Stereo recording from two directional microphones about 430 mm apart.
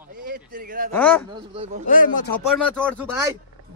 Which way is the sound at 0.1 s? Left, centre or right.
Centre.